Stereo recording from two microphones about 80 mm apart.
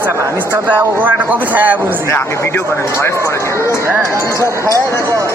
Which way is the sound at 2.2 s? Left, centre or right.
Left.